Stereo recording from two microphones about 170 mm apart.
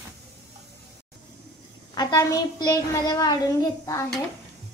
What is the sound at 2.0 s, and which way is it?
A woman's voice, 25° left (ahead or behind).